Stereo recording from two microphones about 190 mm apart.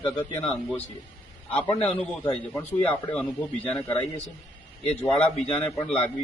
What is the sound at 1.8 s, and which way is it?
Speech, 10° left (ahead or behind).